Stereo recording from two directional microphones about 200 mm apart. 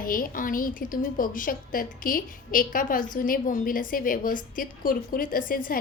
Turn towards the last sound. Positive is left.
turn(degrees=45)  # may be behind; listen again after turning